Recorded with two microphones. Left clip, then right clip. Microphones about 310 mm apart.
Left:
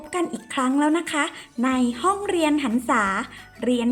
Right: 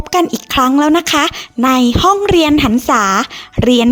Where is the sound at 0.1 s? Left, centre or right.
Right.